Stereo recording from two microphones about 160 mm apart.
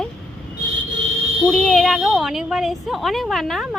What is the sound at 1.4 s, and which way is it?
A woman's voice, 5° left (ahead or behind).